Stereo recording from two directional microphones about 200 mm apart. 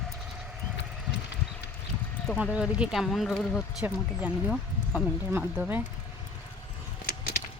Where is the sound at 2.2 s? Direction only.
5° right (ahead or behind).